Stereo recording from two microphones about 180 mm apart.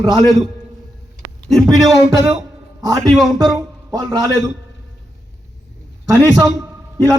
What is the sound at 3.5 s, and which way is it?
Speech, 20° right (ahead or behind).